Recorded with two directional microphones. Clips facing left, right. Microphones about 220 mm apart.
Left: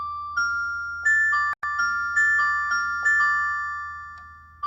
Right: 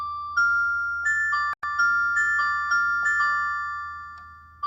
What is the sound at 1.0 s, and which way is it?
Music, 25° left (ahead or behind).